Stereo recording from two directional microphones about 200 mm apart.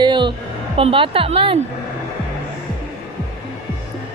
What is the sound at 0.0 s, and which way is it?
Music, 25° right (ahead or behind).